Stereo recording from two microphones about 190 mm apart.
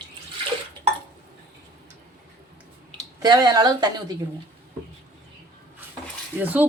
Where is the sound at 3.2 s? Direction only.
20° right (ahead or behind).